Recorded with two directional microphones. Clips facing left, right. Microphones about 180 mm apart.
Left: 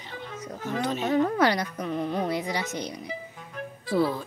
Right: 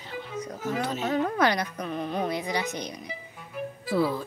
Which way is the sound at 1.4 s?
15° right (ahead or behind).